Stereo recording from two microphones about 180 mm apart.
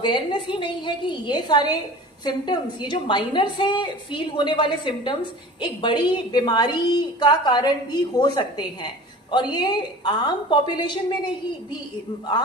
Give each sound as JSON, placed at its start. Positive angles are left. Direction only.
{"t": 0.0, "sound": "a woman's voice", "side_deg": 25}